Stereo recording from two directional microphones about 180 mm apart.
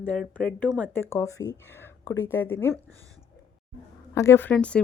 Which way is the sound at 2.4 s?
10° left (ahead or behind).